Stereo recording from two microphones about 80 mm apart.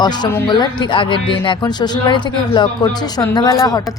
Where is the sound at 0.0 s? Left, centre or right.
Left.